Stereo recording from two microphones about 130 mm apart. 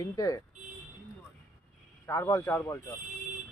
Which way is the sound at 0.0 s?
25° left (ahead or behind).